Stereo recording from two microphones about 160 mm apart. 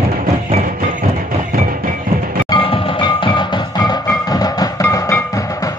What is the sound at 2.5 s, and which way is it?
Music, 30° left (ahead or behind).